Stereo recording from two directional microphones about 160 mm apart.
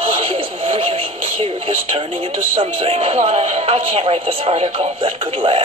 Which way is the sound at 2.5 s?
35° right (ahead or behind).